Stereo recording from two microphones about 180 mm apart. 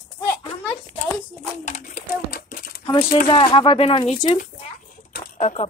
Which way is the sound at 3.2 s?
30° left (ahead or behind).